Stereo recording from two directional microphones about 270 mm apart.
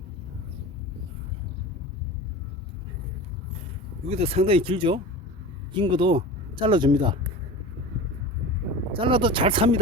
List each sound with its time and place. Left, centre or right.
4.0 s speech: right
9.0 s speech: centre